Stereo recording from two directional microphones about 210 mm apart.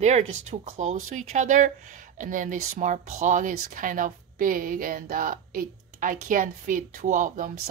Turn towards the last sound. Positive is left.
turn(degrees=-40)  # may be behind; listen again after turning